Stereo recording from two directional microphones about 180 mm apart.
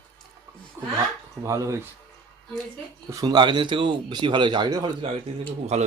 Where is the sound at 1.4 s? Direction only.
15° right (ahead or behind).